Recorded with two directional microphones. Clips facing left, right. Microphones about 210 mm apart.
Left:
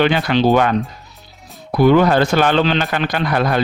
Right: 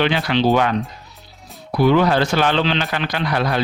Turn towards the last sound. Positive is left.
turn(degrees=50)  # may be behind; listen again after turning